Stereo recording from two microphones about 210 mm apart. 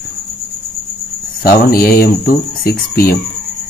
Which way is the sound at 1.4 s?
45° left (ahead or behind).